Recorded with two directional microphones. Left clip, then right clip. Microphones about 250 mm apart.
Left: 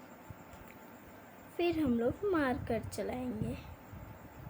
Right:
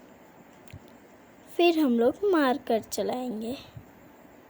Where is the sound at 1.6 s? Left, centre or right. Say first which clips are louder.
Right 10 dB; right.